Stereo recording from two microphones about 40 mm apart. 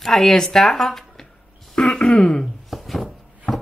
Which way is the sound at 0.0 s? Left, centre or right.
Centre.